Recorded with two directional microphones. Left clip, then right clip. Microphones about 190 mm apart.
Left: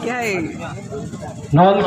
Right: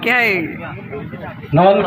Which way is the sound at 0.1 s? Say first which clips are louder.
Right 9 dB; centre (ahead or behind).